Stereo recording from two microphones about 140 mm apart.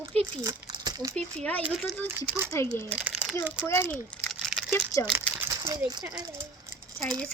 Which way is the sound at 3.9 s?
5° left (ahead or behind).